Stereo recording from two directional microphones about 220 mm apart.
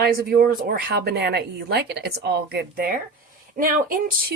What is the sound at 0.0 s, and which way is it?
Speech, 45° right (ahead or behind).